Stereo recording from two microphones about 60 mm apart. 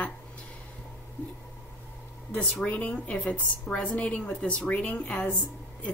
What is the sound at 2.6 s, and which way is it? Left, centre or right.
A woman's voice, left.